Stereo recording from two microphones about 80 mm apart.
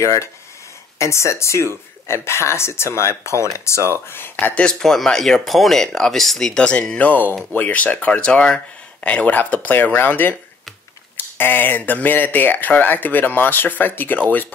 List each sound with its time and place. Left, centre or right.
0.0 s speech: left
4.1 s speech: left
4.6 s speech: centre
7.1 s speech: left